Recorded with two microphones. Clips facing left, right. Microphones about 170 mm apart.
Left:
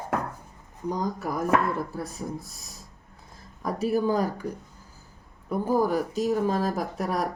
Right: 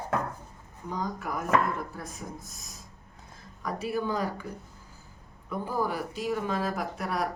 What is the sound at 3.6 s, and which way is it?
Speech, 40° left (ahead or behind).